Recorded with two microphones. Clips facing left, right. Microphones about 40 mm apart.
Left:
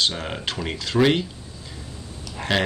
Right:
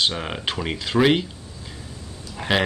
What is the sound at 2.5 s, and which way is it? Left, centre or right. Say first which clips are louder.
Speech: right 1 dB; centre.